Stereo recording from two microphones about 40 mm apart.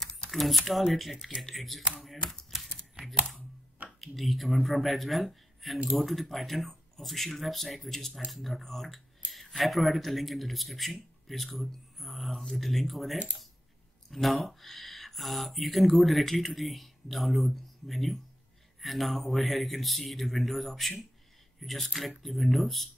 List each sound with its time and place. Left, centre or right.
0.3 s speech: centre
2.5 s shuffling cards: centre
4.0 s speech: centre